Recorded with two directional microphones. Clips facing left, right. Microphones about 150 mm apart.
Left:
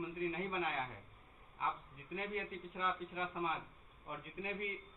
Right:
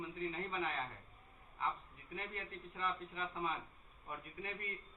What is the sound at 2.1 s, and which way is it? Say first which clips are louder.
A man's voice: left 5 dB; 15° left (ahead or behind).